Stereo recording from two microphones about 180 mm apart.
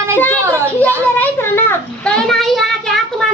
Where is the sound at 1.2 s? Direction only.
10° left (ahead or behind).